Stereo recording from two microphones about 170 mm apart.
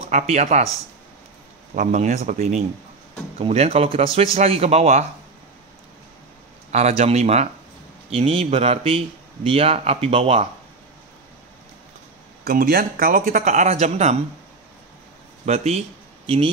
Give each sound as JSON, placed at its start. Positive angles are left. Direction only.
{"t": 0.1, "sound": "speech", "side_deg": -45}
{"t": 1.8, "sound": "speech", "side_deg": -45}
{"t": 6.7, "sound": "speech", "side_deg": -40}
{"t": 12.4, "sound": "speech", "side_deg": -60}
{"t": 15.4, "sound": "speech", "side_deg": -40}